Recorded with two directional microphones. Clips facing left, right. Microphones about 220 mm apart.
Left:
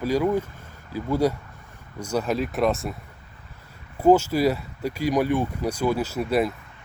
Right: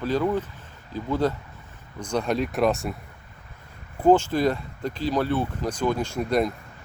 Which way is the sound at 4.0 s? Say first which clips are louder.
Left 1 dB; 10° left (ahead or behind).